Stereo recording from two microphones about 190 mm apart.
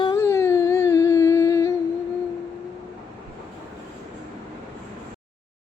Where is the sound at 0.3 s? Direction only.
15° left (ahead or behind).